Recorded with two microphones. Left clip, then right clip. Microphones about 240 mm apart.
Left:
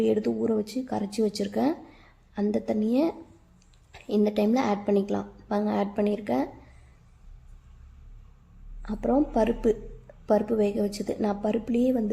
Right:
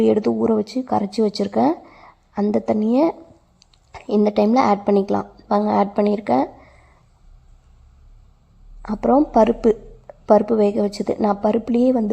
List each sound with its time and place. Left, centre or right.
0.0 s a woman's voice: right
8.8 s speech: right